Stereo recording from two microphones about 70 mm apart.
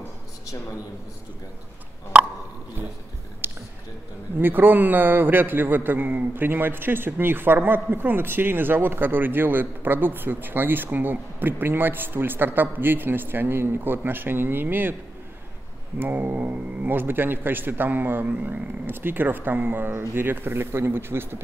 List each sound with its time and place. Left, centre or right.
3.4 s music: right
4.4 s a man's voice: right
16.0 s a man's voice: right